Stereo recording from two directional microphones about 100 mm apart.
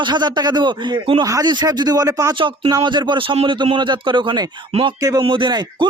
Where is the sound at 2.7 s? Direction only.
50° right (ahead or behind).